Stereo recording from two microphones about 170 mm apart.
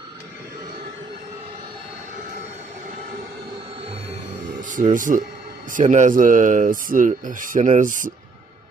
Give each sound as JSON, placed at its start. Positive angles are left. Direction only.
{"t": 4.6, "sound": "speech", "side_deg": -50}